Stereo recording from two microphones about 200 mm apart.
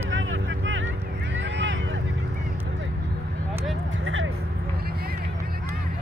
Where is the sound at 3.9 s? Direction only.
75° right (ahead or behind).